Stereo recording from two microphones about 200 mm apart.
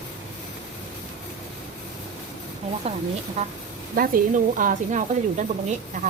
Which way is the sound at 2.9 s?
30° right (ahead or behind).